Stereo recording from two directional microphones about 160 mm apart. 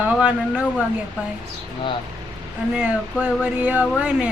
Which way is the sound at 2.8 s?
5° right (ahead or behind).